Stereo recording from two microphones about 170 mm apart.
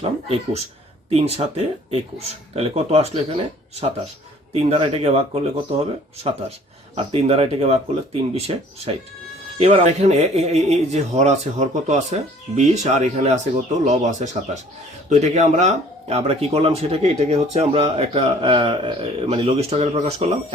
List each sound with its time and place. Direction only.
0.0 s speech: 35° right (ahead or behind)
4.5 s speech: 40° right (ahead or behind)
6.9 s speech: 35° right (ahead or behind)